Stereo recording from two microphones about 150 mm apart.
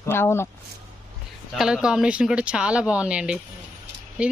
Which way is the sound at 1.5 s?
5° right (ahead or behind).